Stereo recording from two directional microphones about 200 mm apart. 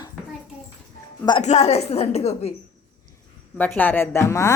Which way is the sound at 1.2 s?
20° left (ahead or behind).